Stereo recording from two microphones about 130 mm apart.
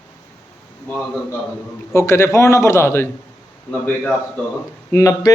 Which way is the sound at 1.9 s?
20° left (ahead or behind).